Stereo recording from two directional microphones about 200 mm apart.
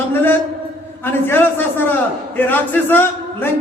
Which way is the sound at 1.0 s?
10° left (ahead or behind).